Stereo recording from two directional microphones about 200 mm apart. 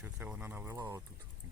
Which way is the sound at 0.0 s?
10° right (ahead or behind).